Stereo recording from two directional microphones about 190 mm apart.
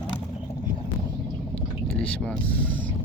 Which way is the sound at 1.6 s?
5° left (ahead or behind).